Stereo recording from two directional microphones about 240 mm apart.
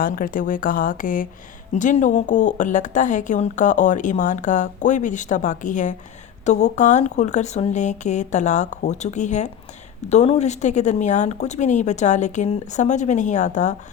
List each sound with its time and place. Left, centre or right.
0.0 s speech: left